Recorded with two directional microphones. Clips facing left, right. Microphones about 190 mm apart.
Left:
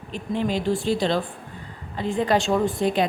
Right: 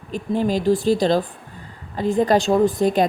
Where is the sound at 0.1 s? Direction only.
40° right (ahead or behind).